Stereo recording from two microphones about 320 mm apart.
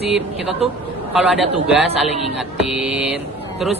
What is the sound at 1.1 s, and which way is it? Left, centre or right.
A man's voice, centre.